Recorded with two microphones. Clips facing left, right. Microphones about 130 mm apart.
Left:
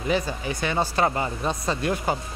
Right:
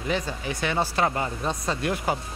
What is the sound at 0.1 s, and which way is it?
Speech, centre (ahead or behind).